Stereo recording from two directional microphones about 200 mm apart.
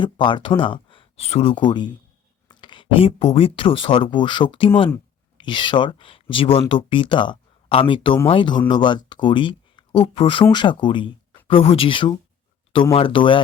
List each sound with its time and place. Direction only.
0.0 s speech: 25° left (ahead or behind)